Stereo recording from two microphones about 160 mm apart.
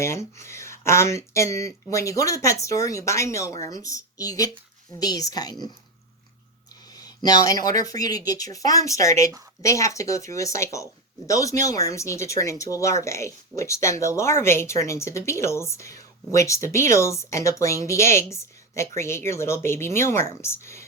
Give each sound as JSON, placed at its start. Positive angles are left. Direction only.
{"t": 0.0, "sound": "speech", "side_deg": 15}
{"t": 6.9, "sound": "a sound", "side_deg": 25}
{"t": 7.8, "sound": "speech", "side_deg": 20}